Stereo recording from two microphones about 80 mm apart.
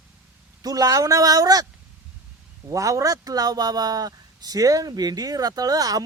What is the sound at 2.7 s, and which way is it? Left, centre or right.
Speech, right.